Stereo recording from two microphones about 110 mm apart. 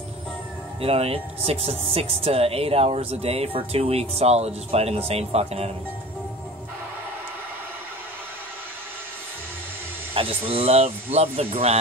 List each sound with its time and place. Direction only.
0.7 s speech: 65° right (ahead or behind)
10.1 s speech: 60° right (ahead or behind)